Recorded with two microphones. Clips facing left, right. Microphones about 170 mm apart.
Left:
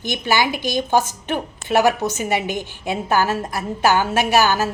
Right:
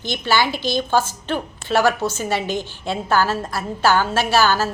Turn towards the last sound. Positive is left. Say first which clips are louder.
# left 1 dB
turn(degrees=15)  # may be behind; listen again after turning